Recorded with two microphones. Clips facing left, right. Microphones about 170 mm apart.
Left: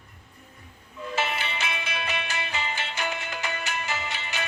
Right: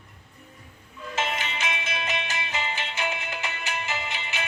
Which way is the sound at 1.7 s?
35° left (ahead or behind).